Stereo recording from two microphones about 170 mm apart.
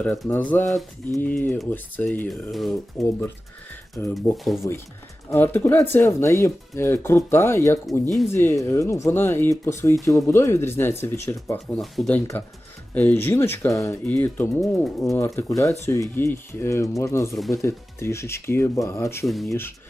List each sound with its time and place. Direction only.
0.0 s speech: 5° left (ahead or behind)
3.0 s speech: 15° left (ahead or behind)
5.5 s speech: 10° left (ahead or behind)
11.5 s speech: centre (ahead or behind)
15.4 s speech: 20° left (ahead or behind)
19.2 s speech: centre (ahead or behind)
19.5 s speech: 15° left (ahead or behind)